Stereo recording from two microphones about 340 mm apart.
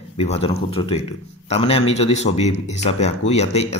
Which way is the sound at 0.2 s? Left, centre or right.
Centre.